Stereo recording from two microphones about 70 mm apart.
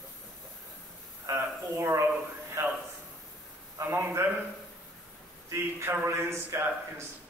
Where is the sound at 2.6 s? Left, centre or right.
Right.